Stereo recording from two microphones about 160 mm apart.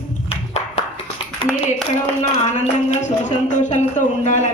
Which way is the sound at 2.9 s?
45° left (ahead or behind).